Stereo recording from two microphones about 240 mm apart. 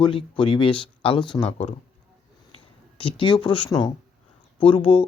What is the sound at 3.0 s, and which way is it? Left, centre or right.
Speech, left.